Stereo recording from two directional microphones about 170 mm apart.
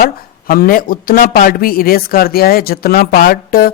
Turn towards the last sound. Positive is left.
turn(degrees=55)  # may be behind; listen again after turning